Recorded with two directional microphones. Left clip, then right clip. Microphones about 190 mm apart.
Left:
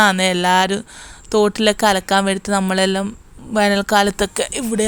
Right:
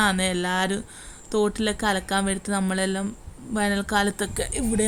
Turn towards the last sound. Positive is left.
turn(degrees=30)  # may be behind; listen again after turning